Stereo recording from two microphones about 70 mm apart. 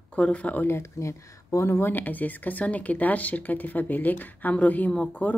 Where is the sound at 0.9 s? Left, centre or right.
Left.